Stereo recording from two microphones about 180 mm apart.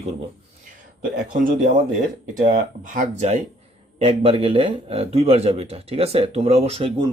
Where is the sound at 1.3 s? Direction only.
45° right (ahead or behind).